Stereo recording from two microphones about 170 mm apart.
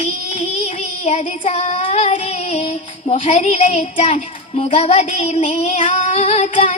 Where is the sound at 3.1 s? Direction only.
40° left (ahead or behind).